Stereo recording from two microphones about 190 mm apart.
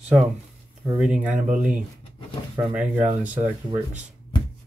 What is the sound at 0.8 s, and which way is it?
Speech, 5° right (ahead or behind).